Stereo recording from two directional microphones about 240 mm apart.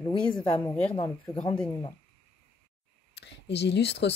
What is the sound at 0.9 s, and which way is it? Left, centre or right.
Speech, left.